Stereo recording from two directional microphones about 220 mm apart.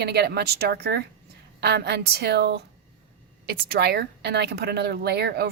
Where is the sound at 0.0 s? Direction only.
45° right (ahead or behind).